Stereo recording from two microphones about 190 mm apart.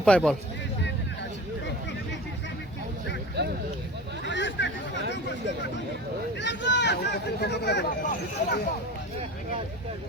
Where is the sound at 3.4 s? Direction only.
60° right (ahead or behind).